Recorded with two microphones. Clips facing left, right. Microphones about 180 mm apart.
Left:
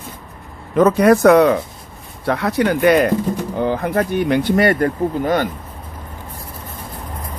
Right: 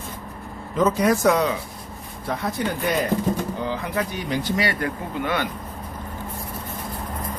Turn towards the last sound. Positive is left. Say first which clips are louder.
# left 8 dB
turn(degrees=40)  # may be behind; listen again after turning